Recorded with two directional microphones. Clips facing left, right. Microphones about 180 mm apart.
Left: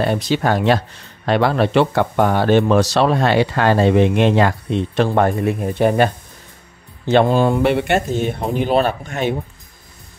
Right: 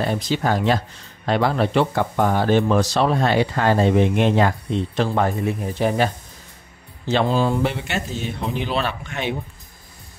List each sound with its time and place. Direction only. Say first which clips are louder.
0.0 s speech: left 4 dB; 70° left (ahead or behind)
7.1 s speech: left 5 dB; 55° left (ahead or behind)